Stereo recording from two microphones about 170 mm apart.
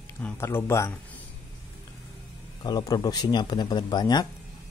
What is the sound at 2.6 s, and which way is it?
Speech, 25° left (ahead or behind).